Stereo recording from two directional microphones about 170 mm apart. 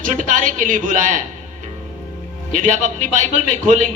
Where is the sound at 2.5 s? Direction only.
45° right (ahead or behind).